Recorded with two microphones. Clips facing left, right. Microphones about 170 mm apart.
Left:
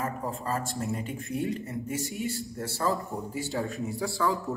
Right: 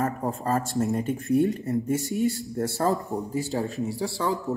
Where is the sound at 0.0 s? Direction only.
45° right (ahead or behind).